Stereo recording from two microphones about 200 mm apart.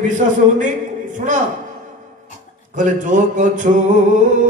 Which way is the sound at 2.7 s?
40° right (ahead or behind).